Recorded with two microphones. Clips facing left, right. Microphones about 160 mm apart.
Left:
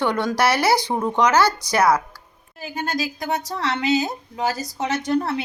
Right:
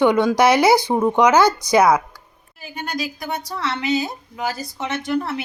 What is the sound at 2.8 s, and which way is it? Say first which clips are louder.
A woman's voice: left 1 dB; 40° left (ahead or behind).